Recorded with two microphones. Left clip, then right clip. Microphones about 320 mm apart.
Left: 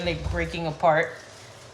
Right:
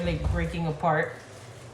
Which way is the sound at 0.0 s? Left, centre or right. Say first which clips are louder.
Left 3 dB; centre.